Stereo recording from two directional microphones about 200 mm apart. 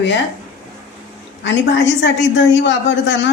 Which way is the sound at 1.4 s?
65° left (ahead or behind).